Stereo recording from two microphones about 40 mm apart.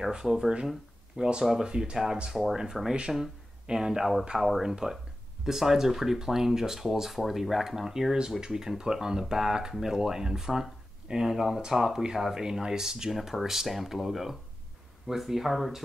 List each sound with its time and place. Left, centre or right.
0.0 s speech: centre
1.6 s speech: right; by 15.8 s centre